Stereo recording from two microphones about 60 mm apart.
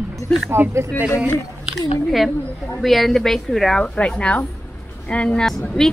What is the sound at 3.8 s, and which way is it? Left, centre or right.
A woman's voice, centre.